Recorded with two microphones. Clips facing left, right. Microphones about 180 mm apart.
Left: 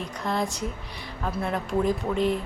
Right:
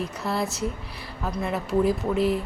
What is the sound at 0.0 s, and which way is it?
A woman's voice, 5° right (ahead or behind).